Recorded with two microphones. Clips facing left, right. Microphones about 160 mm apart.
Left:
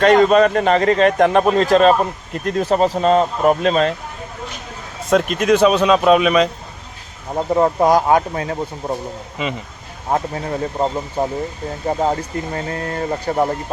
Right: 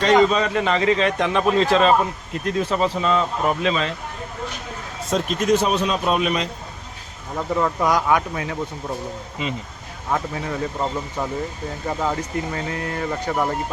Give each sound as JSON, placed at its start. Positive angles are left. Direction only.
{"t": 0.0, "sound": "a man's voice", "side_deg": 55}
{"t": 5.0, "sound": "speech", "side_deg": 65}
{"t": 7.3, "sound": "speech", "side_deg": 35}
{"t": 10.1, "sound": "speech", "side_deg": 35}